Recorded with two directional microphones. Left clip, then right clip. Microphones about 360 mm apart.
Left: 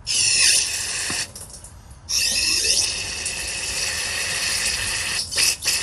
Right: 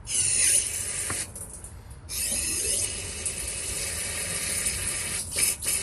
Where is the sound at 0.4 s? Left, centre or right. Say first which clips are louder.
Left 10 dB; left.